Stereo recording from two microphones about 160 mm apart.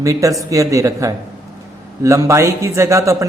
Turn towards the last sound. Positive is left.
turn(degrees=-20)  # may be behind; listen again after turning